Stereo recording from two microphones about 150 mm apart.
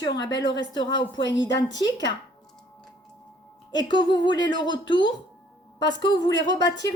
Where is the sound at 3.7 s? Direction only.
30° left (ahead or behind).